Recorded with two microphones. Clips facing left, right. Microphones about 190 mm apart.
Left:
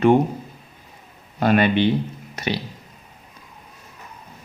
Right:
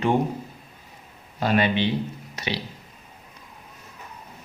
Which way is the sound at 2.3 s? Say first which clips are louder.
Left 5 dB; 50° left (ahead or behind).